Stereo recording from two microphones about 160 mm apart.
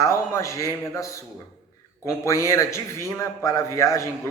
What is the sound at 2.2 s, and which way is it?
Speech, 20° left (ahead or behind).